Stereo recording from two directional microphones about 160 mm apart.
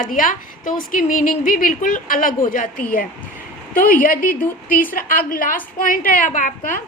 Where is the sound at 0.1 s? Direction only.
55° left (ahead or behind).